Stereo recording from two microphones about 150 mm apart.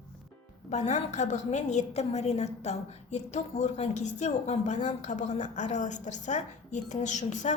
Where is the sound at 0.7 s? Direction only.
50° left (ahead or behind).